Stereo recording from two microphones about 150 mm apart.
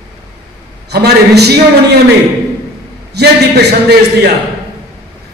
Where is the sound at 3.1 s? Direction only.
90° right.